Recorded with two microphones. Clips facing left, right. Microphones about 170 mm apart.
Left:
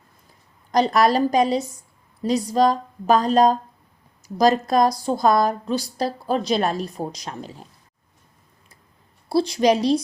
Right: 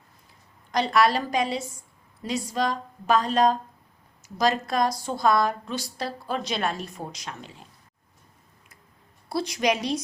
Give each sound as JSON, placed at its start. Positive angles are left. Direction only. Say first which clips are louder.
{"t": 0.7, "sound": "a woman's voice", "louder": "left 4 dB", "side_deg": 40}
{"t": 9.3, "sound": "a woman's voice", "louder": "left 7 dB", "side_deg": 30}